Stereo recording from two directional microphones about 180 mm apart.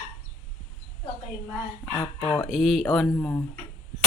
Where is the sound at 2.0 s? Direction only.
15° left (ahead or behind).